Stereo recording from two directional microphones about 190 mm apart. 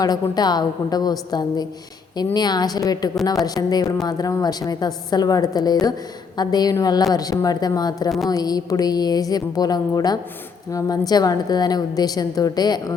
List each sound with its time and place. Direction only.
0.0 s a woman's voice: 20° left (ahead or behind)